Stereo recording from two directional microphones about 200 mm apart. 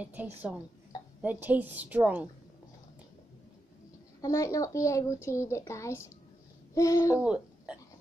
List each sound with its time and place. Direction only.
0.0 s a woman's voice: 10° right (ahead or behind)
4.2 s a woman's voice: 15° left (ahead or behind)
7.2 s a sound: 5° right (ahead or behind)